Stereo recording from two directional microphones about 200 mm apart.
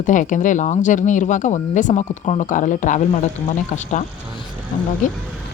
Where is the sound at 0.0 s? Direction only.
40° left (ahead or behind).